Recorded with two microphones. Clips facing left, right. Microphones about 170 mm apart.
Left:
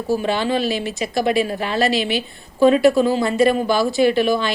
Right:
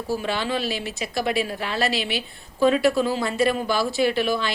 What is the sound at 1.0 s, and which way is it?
Speech, 45° left (ahead or behind).